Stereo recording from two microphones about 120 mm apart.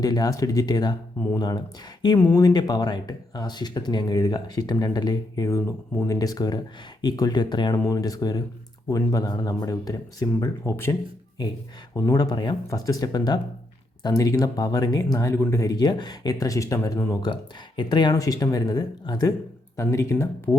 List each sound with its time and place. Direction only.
0.0 s speech: 35° left (ahead or behind)
11.9 s speech: 30° left (ahead or behind)
19.7 s speech: 25° left (ahead or behind)